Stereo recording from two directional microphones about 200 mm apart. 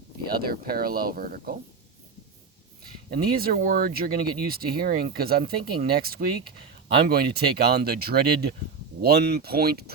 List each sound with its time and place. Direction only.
0.3 s speech: 50° right (ahead or behind)
3.1 s speech: 50° right (ahead or behind)